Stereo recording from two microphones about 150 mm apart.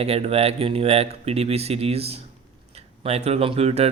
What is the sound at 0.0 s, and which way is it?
Speech, 40° right (ahead or behind).